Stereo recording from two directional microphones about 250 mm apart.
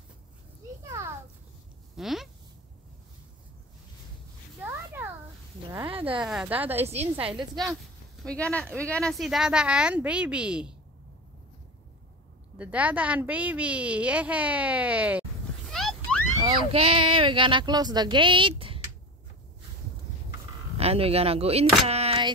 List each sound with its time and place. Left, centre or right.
0.8 s children playing: centre
2.0 s speech: centre
6.0 s a woman's voice: centre
6.8 s speech: right
7.3 s a woman's voice: centre
12.5 s a woman's voice: centre
15.7 s a sound: centre
16.3 s speech: centre
20.7 s speech: right